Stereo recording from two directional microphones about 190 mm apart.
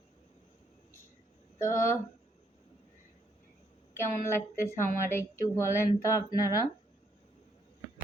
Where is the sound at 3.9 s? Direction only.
15° left (ahead or behind).